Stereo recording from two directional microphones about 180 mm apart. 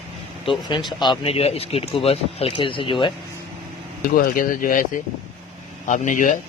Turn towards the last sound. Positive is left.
turn(degrees=45)  # may be behind; listen again after turning